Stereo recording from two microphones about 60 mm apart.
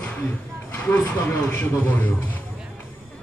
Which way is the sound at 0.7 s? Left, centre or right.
Left.